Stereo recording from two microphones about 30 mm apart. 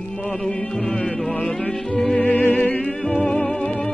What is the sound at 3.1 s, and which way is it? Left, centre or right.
Music, left.